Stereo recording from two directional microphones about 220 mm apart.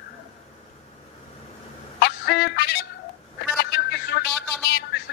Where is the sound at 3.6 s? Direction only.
45° left (ahead or behind).